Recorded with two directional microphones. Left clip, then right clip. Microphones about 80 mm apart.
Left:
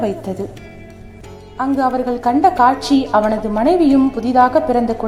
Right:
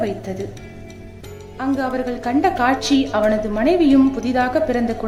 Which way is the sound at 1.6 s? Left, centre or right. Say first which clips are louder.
Left 5 dB; left.